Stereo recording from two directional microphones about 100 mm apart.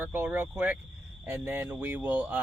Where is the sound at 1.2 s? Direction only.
20° right (ahead or behind).